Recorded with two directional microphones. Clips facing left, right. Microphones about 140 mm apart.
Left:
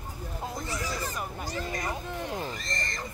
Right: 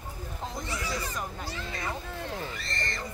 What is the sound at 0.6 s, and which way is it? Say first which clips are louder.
Speech: left 1 dB; 40° left (ahead or behind).